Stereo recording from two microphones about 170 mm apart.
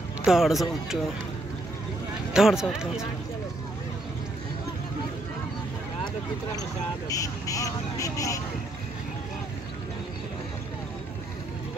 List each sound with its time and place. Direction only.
0.2 s speech: centre (ahead or behind)
2.3 s speech: 5° right (ahead or behind)
7.1 s speech: 20° left (ahead or behind)